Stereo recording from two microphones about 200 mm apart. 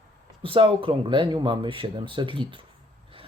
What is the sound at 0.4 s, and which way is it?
Speech, 25° right (ahead or behind).